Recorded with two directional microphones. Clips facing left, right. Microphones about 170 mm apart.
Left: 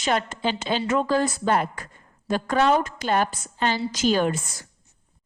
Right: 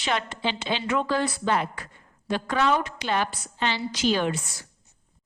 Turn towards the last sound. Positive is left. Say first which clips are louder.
# left 3 dB
turn(degrees=50)  # may be behind; listen again after turning